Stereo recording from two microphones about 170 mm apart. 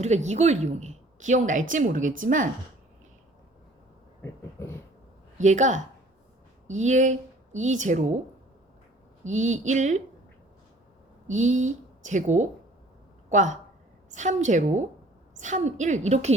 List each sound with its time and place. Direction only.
0.0 s a woman's voice: 40° right (ahead or behind)
5.4 s a woman's voice: 45° right (ahead or behind)
9.2 s a woman's voice: 45° right (ahead or behind)
11.3 s a woman's voice: 45° right (ahead or behind)